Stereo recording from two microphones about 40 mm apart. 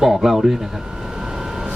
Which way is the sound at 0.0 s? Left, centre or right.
Centre.